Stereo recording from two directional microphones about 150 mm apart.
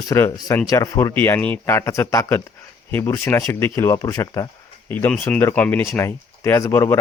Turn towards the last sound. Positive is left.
turn(degrees=20)  # may be behind; listen again after turning